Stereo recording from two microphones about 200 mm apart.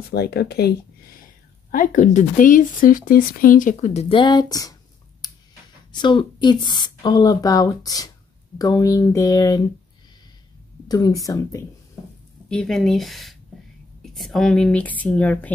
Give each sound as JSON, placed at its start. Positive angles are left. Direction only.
{"t": 0.1, "sound": "speech", "side_deg": 55}
{"t": 5.9, "sound": "speech", "side_deg": 20}
{"t": 10.9, "sound": "speech", "side_deg": 15}
{"t": 12.4, "sound": "speech", "side_deg": 5}